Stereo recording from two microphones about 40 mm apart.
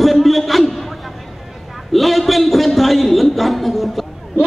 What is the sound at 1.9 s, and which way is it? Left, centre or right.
A man's voice, centre.